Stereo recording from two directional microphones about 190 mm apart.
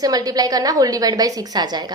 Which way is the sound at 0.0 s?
20° right (ahead or behind).